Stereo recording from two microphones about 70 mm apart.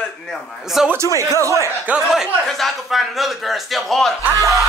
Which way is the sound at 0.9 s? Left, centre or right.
Right.